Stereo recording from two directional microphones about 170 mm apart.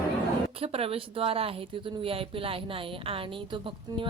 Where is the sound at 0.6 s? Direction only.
35° right (ahead or behind).